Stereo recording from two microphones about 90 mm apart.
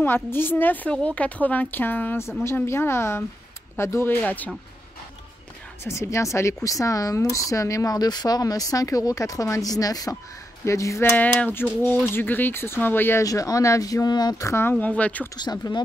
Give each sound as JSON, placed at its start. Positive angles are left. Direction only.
{"t": 0.0, "sound": "speech", "side_deg": 25}
{"t": 5.9, "sound": "speech", "side_deg": 35}
{"t": 11.1, "sound": "speech", "side_deg": 20}
{"t": 13.2, "sound": "speech", "side_deg": 40}
{"t": 14.4, "sound": "speech", "side_deg": 30}
{"t": 15.3, "sound": "speech", "side_deg": 50}